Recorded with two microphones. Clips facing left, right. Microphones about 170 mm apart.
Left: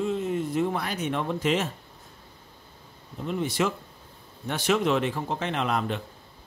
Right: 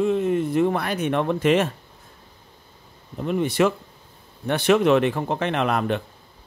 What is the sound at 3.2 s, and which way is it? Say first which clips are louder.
Speech: right 6 dB; 60° right (ahead or behind).